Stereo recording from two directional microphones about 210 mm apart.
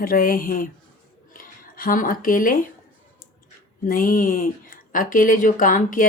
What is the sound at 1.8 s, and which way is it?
Speech, 40° left (ahead or behind).